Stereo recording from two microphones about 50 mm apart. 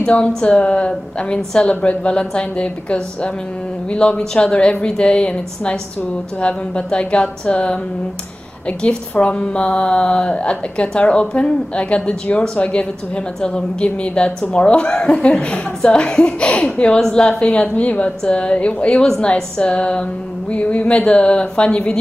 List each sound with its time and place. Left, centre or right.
0.0 s a woman's voice: left